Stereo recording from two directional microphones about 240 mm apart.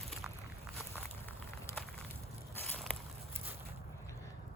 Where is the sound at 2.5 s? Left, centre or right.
Centre.